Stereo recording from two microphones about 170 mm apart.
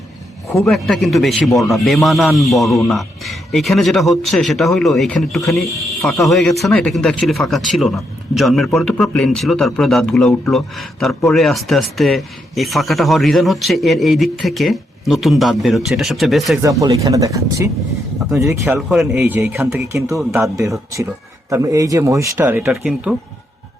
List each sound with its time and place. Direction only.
0.7 s speech: centre (ahead or behind)
16.6 s speech: 20° right (ahead or behind)
18.9 s speech: centre (ahead or behind)
19.2 s speech: 15° right (ahead or behind)